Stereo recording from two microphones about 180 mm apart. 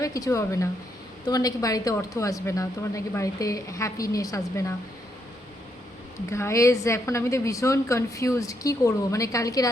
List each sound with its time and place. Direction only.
0.0 s a woman's voice: 20° left (ahead or behind)
6.3 s a woman's voice: 15° left (ahead or behind)